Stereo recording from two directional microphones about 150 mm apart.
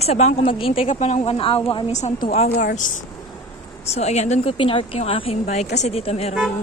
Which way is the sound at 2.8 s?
65° left (ahead or behind).